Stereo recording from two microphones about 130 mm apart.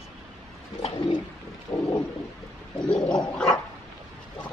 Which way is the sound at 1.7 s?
40° left (ahead or behind).